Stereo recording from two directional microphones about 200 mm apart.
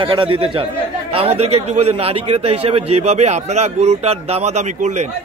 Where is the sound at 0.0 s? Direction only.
25° right (ahead or behind).